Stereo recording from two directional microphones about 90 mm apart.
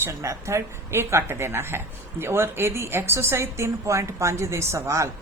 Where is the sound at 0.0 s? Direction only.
35° right (ahead or behind).